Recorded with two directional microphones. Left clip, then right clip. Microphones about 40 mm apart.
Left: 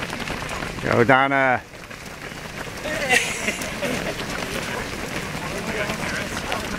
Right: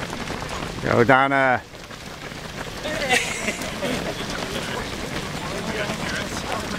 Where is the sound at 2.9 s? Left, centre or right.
Left.